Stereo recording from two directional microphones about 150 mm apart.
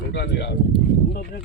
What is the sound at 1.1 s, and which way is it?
Speech, 90° left.